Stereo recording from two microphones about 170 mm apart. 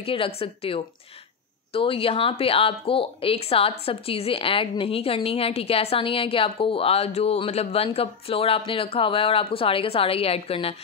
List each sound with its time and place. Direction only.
0.0 s speech: 35° left (ahead or behind)